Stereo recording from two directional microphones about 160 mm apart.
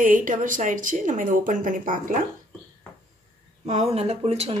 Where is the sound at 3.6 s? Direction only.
45° right (ahead or behind).